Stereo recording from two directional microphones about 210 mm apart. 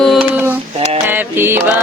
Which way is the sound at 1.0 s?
10° right (ahead or behind).